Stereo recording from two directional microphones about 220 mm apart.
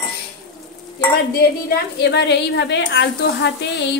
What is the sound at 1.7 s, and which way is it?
A woman's voice, 50° left (ahead or behind).